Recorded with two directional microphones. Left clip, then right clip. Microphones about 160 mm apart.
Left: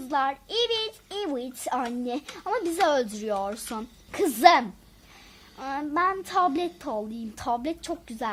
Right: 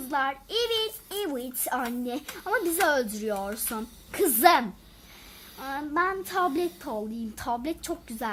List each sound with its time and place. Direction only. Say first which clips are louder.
0.1 s a child's voice: left 1 dB; 30° left (ahead or behind)